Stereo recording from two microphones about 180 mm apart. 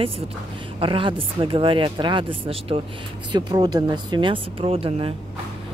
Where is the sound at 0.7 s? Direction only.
30° right (ahead or behind).